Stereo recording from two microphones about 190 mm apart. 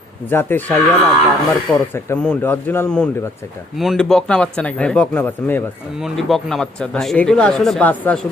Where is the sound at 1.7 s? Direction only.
5° left (ahead or behind).